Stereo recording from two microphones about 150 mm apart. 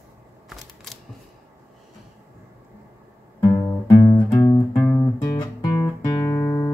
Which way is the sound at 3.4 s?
25° left (ahead or behind).